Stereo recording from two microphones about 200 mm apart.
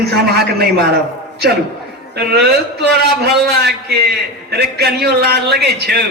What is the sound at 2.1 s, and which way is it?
A man's voice, 55° right (ahead or behind).